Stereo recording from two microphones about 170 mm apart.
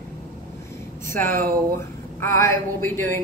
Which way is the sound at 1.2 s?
55° right (ahead or behind).